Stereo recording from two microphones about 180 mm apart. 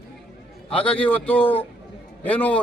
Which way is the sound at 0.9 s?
10° left (ahead or behind).